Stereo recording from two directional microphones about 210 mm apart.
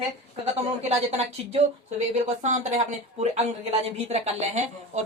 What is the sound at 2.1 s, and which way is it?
Speech, 35° right (ahead or behind).